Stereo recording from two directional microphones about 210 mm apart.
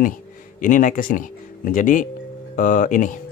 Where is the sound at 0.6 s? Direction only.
40° left (ahead or behind).